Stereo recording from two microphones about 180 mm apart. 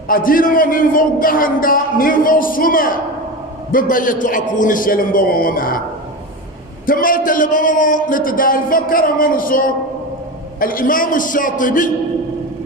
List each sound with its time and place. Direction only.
0.1 s a man's voice: 50° left (ahead or behind)
6.8 s a man's voice: 50° left (ahead or behind)